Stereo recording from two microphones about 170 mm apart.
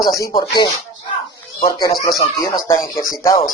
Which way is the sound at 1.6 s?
20° left (ahead or behind).